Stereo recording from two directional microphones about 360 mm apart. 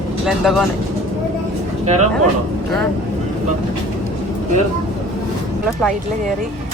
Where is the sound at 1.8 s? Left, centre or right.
Centre.